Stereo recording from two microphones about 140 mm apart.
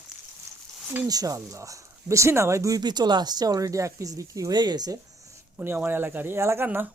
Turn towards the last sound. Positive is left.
turn(degrees=-15)  # may be behind; listen again after turning